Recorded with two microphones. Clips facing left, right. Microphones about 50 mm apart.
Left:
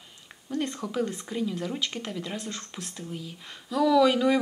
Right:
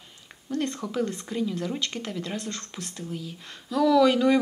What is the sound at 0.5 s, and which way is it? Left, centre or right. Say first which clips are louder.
Speech: right 1 dB; centre.